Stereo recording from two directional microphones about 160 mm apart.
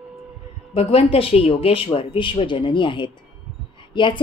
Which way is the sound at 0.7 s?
40° left (ahead or behind).